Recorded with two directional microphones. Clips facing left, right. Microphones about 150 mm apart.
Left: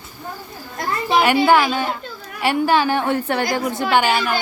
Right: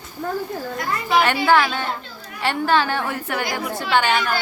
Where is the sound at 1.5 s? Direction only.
15° left (ahead or behind).